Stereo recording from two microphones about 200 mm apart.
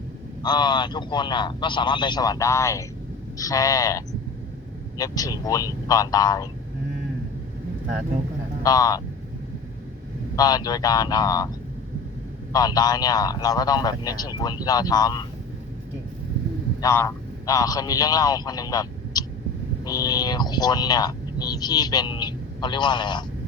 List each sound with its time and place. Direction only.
0.4 s speech: 20° left (ahead or behind)
8.6 s speech: 20° left (ahead or behind)
10.3 s speech: 20° left (ahead or behind)
12.5 s speech: 20° left (ahead or behind)
16.8 s a man's voice: 15° left (ahead or behind)